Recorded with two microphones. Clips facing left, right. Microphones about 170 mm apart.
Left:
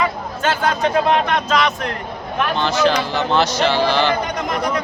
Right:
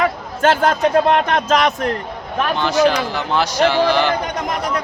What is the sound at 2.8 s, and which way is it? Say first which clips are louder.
Speech: right 1 dB; 10° right (ahead or behind).